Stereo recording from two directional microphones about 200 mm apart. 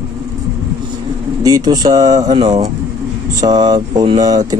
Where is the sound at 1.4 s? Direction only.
20° right (ahead or behind).